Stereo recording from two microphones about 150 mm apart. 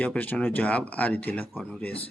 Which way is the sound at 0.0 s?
10° left (ahead or behind).